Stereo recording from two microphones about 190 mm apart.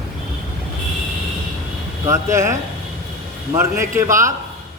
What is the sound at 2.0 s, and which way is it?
A man's voice, 15° right (ahead or behind).